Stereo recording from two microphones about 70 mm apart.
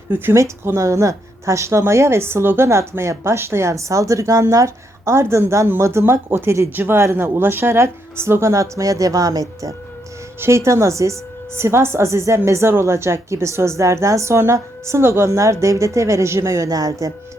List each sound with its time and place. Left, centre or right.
0.1 s speech: right
10.4 s speech: right